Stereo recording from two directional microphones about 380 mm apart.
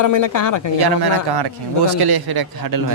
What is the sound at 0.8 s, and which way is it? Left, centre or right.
A man's voice, right.